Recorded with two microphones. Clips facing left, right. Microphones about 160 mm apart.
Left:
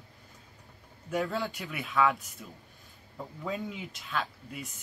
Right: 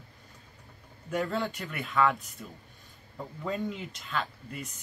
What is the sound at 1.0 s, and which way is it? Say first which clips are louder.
Speech: right 1 dB; centre (ahead or behind).